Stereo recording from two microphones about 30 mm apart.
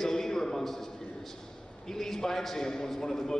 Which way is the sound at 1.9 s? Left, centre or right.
Centre.